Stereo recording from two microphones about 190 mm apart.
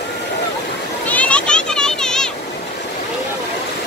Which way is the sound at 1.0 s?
5° left (ahead or behind).